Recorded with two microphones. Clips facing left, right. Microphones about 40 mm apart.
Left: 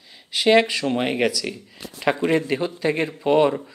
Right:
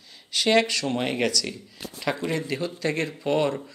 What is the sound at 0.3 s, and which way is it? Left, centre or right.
Speech, centre.